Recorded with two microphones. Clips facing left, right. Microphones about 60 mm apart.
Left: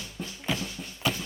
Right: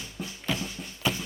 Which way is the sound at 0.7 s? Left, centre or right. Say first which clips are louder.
Even; centre.